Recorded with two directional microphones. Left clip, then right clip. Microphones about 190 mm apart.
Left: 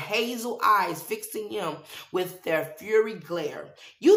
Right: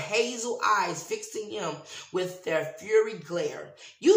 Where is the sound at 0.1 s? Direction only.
45° left (ahead or behind).